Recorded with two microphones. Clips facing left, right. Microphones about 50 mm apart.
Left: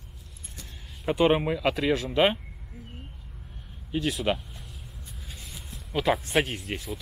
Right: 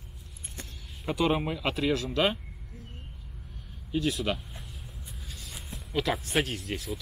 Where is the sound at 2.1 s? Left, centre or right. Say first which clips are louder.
Left 4 dB; left.